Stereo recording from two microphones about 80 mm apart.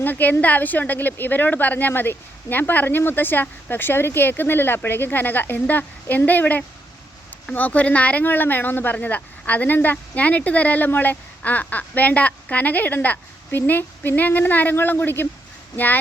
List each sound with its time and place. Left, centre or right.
0.0 s a woman's voice: left